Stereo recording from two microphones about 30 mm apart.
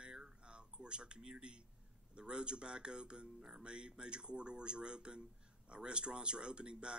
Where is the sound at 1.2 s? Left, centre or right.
Right.